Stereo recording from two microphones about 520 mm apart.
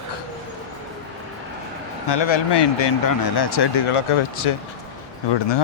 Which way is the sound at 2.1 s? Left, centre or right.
Left.